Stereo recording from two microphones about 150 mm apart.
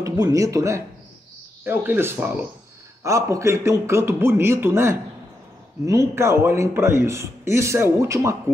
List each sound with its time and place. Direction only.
0.0 s a man's voice: 20° right (ahead or behind)